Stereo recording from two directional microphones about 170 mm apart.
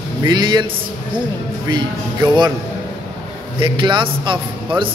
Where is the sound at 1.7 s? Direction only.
25° right (ahead or behind).